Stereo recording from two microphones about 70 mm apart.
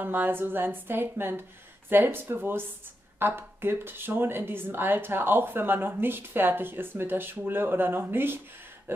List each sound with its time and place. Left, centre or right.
0.0 s speech: right